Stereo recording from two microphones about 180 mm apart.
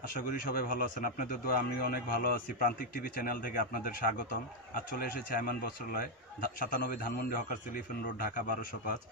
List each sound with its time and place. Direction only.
0.1 s speech: 55° left (ahead or behind)